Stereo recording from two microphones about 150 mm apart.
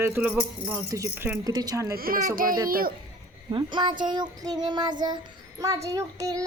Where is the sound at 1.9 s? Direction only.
80° right.